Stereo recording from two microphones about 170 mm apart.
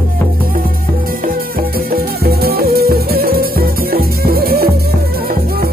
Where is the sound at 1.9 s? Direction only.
65° right (ahead or behind).